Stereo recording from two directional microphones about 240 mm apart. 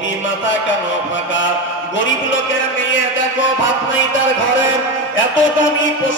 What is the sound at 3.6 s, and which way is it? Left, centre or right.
Music, left.